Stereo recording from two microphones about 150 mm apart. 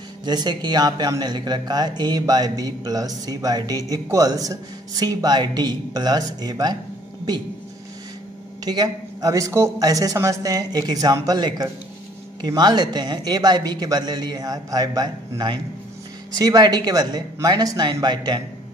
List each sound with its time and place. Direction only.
0.2 s speech: 30° right (ahead or behind)
8.6 s speech: 25° right (ahead or behind)